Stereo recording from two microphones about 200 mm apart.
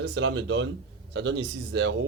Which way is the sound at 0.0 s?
65° right (ahead or behind).